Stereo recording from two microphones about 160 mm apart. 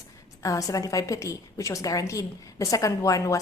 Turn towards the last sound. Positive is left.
turn(degrees=20)  # may be behind; listen again after turning